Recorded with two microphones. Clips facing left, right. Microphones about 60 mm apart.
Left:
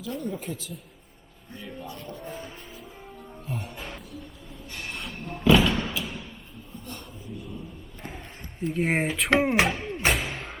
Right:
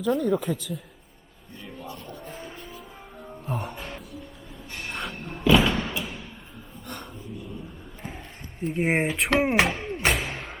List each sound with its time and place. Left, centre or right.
0.0 s speech: right
2.1 s music: centre
3.5 s music: right
3.8 s music: centre
4.7 s a sound: centre
5.0 s thump: centre
6.0 s a sound: centre
8.6 s speech: centre
9.6 s music: centre